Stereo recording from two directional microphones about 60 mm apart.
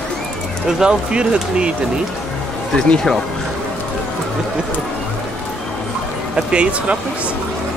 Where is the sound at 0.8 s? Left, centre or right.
Centre.